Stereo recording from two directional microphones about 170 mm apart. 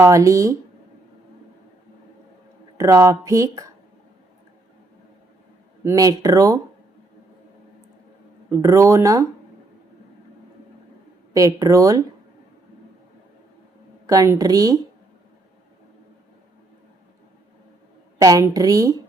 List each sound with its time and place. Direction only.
0.0 s speech: 20° right (ahead or behind)
2.7 s speech: 20° right (ahead or behind)
5.8 s speech: 15° right (ahead or behind)
8.4 s speech: 15° right (ahead or behind)
11.3 s speech: 20° right (ahead or behind)
14.1 s speech: 20° right (ahead or behind)
18.2 s speech: 20° right (ahead or behind)